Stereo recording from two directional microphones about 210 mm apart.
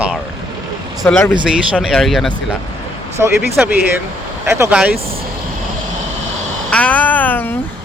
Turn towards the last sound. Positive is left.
turn(degrees=10)  # may be behind; listen again after turning